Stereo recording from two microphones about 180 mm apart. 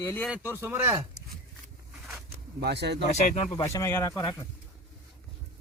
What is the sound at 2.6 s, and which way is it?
Speech, 65° right (ahead or behind).